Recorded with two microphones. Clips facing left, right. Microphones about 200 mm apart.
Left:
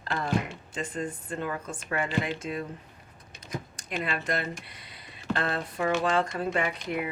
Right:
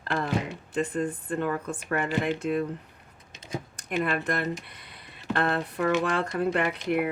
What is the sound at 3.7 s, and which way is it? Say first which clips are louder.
Speech: right 6 dB; 55° right (ahead or behind).